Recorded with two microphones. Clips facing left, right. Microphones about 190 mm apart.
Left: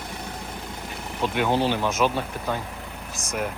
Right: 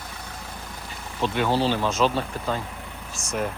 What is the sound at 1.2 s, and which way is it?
Speech, 15° left (ahead or behind).